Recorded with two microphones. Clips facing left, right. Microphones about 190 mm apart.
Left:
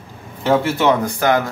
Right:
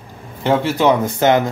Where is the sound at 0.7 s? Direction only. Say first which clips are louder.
Right 2 dB; 20° right (ahead or behind).